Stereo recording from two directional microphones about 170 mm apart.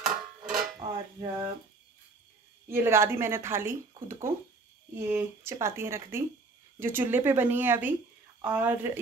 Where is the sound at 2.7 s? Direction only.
15° right (ahead or behind).